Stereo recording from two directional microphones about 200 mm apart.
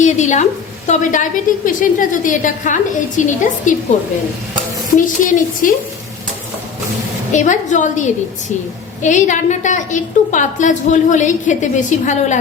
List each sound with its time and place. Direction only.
0.0 s a woman's voice: 35° left (ahead or behind)
4.9 s a woman's voice: 40° left (ahead or behind)
7.3 s a woman's voice: 40° left (ahead or behind)